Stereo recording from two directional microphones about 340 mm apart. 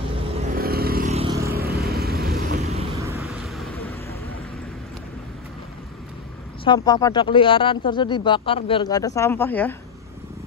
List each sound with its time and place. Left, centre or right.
0.4 s vehicle: right
3.1 s vehicle: centre
6.6 s speech: centre